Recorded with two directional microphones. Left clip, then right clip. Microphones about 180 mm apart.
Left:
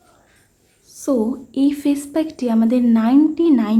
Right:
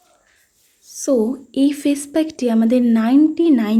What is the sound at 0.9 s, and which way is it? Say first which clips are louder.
A woman's voice: right 2 dB; 25° right (ahead or behind).